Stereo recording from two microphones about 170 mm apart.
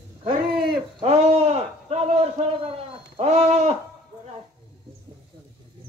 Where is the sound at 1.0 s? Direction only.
40° right (ahead or behind).